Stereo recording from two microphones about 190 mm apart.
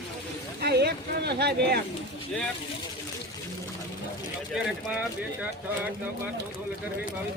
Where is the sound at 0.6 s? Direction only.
60° right (ahead or behind).